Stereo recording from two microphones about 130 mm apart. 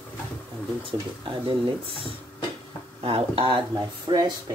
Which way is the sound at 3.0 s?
45° right (ahead or behind).